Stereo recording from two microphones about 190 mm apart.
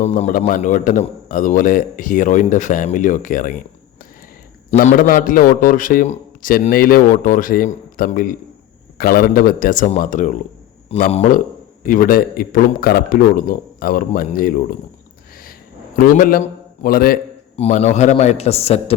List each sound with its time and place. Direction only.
0.0 s a man's voice: 35° left (ahead or behind)
4.8 s a man's voice: 45° left (ahead or behind)
16.0 s a man's voice: 45° left (ahead or behind)
17.6 s a man's voice: 35° left (ahead or behind)